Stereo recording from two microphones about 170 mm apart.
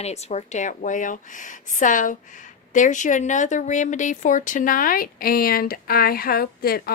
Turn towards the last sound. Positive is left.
turn(degrees=65)  # may be behind; listen again after turning